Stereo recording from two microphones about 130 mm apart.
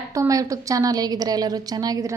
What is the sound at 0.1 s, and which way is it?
A woman's voice, 25° right (ahead or behind).